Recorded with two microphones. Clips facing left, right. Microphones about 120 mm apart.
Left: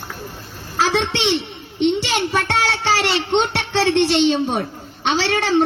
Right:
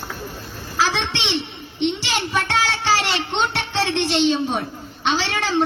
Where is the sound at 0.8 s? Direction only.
50° left (ahead or behind).